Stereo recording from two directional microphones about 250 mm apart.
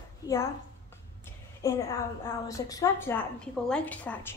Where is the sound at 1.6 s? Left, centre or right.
Centre.